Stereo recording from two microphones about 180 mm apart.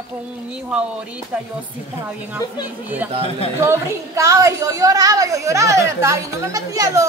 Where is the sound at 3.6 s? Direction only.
15° right (ahead or behind).